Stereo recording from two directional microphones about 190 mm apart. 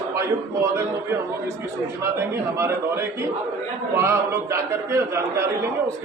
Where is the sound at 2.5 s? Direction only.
15° right (ahead or behind).